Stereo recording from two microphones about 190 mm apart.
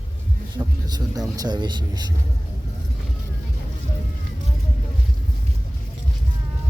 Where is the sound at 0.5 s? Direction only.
20° right (ahead or behind).